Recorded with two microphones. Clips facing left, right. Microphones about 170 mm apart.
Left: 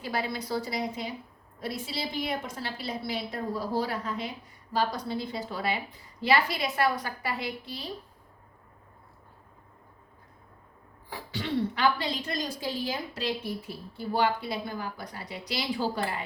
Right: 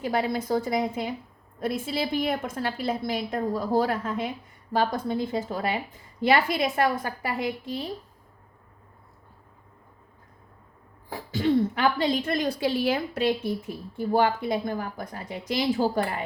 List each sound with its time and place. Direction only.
0.0 s speech: 45° right (ahead or behind)
11.1 s speech: 40° right (ahead or behind)